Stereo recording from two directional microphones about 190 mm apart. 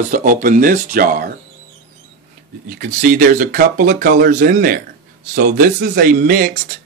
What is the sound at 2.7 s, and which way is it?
Speech, 45° right (ahead or behind).